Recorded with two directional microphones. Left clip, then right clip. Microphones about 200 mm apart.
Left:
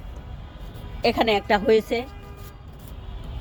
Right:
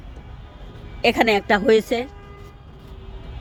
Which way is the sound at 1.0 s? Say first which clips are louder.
Right 3 dB; 45° right (ahead or behind).